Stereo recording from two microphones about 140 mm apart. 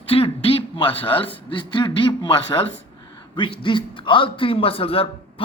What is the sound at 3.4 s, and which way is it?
A man's voice, 35° left (ahead or behind).